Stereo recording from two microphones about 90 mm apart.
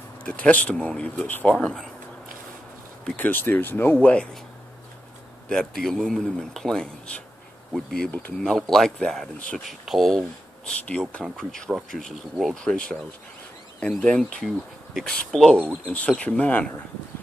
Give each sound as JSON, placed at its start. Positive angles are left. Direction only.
{"t": 0.2, "sound": "speech", "side_deg": 15}
{"t": 3.2, "sound": "speech", "side_deg": 20}
{"t": 5.5, "sound": "speech", "side_deg": 5}
{"t": 10.8, "sound": "speech", "side_deg": 15}